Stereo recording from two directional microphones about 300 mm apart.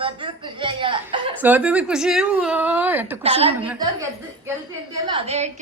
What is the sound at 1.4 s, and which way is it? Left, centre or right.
A child's voice, centre.